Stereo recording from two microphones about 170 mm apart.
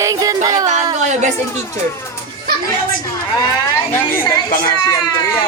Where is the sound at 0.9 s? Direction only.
45° right (ahead or behind).